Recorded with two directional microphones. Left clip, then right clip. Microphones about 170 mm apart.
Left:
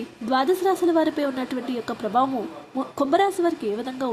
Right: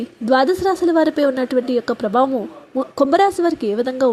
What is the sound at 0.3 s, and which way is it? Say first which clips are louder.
A woman's voice: right 6 dB; 30° right (ahead or behind).